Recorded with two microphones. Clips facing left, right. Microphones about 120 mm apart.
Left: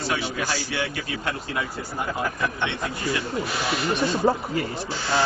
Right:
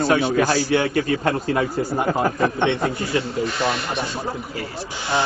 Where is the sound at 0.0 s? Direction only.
50° right (ahead or behind).